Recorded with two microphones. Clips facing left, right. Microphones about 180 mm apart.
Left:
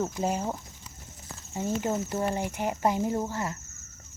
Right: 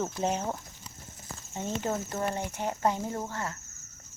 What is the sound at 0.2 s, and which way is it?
Speech, 5° left (ahead or behind).